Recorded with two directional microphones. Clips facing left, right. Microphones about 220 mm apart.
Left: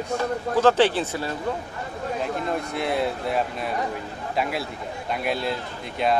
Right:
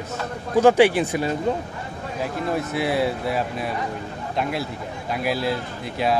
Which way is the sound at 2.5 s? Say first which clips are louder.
Right 5 dB; 5° right (ahead or behind).